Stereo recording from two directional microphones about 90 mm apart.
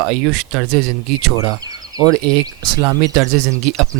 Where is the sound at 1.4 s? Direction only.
45° right (ahead or behind).